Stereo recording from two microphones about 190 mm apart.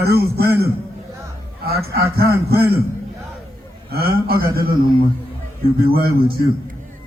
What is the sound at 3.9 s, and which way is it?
Speech, 55° right (ahead or behind).